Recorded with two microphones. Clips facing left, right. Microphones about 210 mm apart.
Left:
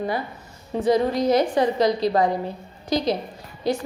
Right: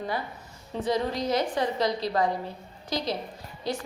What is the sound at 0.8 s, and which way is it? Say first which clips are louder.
A woman's voice: left 7 dB; 10° left (ahead or behind).